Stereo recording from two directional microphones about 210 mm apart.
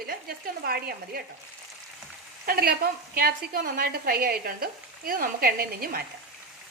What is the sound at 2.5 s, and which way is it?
A woman's voice, 45° right (ahead or behind).